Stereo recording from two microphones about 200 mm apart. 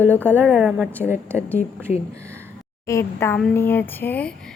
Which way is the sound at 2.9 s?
15° left (ahead or behind).